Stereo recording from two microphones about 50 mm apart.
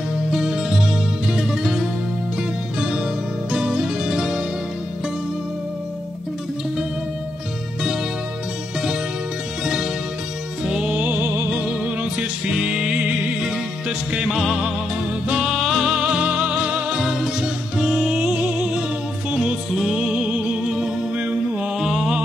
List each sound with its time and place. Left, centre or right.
0.3 s music: centre
10.6 s music: centre
10.9 s music: right
11.5 s music: right
21.2 s music: right
21.7 s music: centre